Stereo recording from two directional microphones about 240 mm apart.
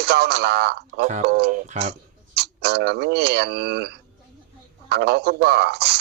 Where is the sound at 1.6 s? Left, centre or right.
Right.